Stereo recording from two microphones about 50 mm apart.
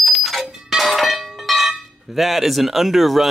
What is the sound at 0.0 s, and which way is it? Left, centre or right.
Music, centre.